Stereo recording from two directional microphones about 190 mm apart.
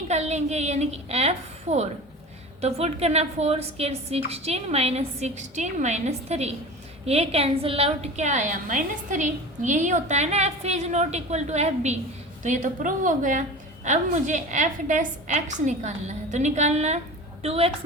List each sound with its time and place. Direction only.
0.1 s a woman's voice: 35° right (ahead or behind)